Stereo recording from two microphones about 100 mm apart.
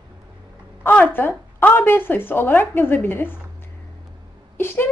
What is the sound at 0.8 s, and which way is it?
A woman's voice, 15° left (ahead or behind).